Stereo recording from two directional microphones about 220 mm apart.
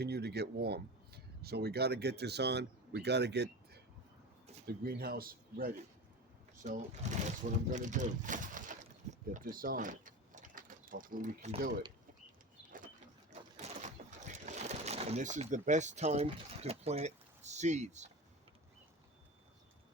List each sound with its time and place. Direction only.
0.0 s speech: 45° right (ahead or behind)
7.7 s speech: 35° right (ahead or behind)
13.6 s a sound: 30° right (ahead or behind)